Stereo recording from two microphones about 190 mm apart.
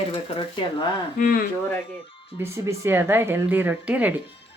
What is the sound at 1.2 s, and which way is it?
Speech, 50° left (ahead or behind).